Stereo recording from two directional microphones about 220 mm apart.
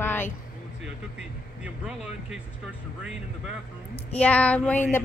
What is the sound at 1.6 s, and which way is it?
Speech, 5° right (ahead or behind).